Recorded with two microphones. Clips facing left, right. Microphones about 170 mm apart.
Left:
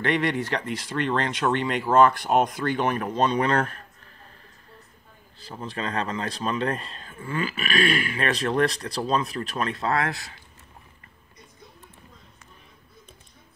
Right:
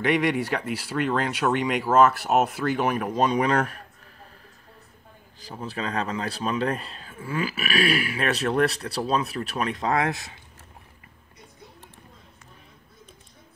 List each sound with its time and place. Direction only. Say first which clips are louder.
0.0 s speech: right 2 dB; 10° right (ahead or behind)
5.4 s speech: even; 10° right (ahead or behind)